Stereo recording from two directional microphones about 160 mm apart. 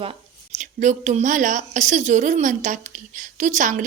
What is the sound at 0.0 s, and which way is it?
Speech, 40° right (ahead or behind).